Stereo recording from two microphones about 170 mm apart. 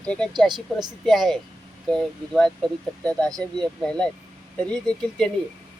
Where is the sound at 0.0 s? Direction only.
5° left (ahead or behind).